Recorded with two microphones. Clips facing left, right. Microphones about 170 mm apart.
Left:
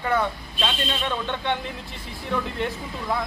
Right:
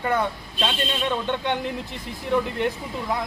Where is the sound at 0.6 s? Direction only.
15° right (ahead or behind).